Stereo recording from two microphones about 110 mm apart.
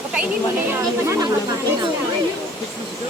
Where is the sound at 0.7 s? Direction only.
25° right (ahead or behind).